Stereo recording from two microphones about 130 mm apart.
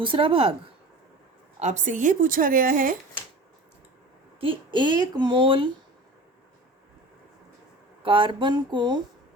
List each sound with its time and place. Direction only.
0.0 s speech: 45° right (ahead or behind)
1.5 s a woman's voice: 60° right (ahead or behind); by 2.9 s 90° right
4.4 s a woman's voice: 40° right (ahead or behind)
8.0 s a woman's voice: 40° right (ahead or behind)